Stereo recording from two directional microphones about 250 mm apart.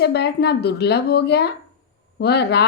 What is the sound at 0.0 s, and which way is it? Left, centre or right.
A woman's voice, left.